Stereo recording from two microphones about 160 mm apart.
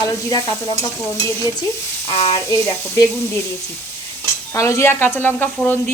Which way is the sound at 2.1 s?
40° left (ahead or behind).